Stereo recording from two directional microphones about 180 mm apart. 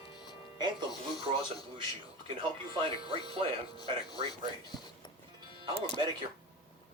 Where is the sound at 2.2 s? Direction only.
30° right (ahead or behind).